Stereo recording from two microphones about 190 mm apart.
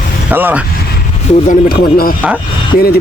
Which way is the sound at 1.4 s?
50° left (ahead or behind).